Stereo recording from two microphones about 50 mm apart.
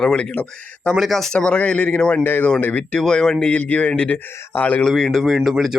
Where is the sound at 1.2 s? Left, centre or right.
Centre.